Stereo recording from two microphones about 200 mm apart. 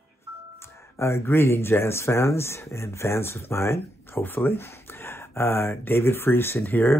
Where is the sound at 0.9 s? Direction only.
15° left (ahead or behind).